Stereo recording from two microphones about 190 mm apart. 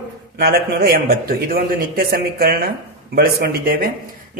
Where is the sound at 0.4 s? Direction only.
55° right (ahead or behind).